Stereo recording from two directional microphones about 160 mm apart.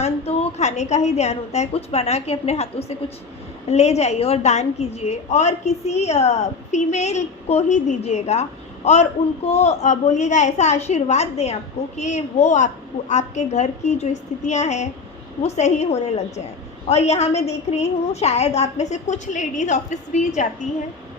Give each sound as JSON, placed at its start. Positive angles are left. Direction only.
{"t": 0.0, "sound": "a woman's voice", "side_deg": 40}